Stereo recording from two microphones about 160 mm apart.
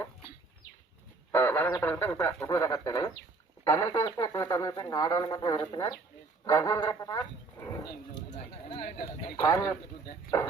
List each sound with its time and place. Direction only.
1.3 s a sound: 15° left (ahead or behind)
1.8 s speech: 15° left (ahead or behind)
8.8 s speech: 70° left (ahead or behind)
9.2 s speech: 20° left (ahead or behind)